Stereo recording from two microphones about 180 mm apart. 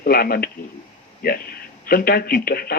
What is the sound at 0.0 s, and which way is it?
A man's voice, 55° left (ahead or behind).